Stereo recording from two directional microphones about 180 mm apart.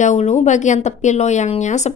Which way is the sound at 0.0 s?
40° left (ahead or behind).